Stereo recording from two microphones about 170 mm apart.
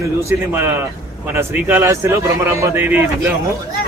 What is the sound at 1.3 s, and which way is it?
A man's voice, 10° right (ahead or behind).